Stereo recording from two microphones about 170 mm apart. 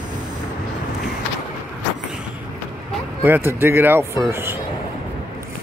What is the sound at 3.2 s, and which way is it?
Speech, 10° right (ahead or behind).